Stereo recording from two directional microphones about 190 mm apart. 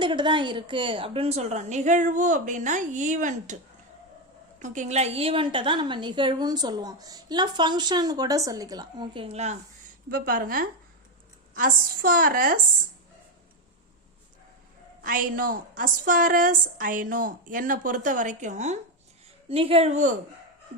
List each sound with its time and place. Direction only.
0.0 s a woman's voice: 25° right (ahead or behind); by 3.6 s 40° right (ahead or behind)
4.6 s a woman's voice: 40° right (ahead or behind)
10.1 s a woman's voice: 50° right (ahead or behind)
15.0 s a woman's voice: 45° right (ahead or behind)